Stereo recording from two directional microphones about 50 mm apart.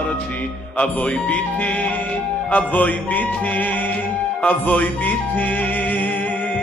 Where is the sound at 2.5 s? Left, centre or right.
Left.